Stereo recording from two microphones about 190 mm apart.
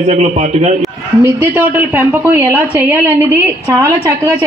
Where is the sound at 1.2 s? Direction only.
10° right (ahead or behind).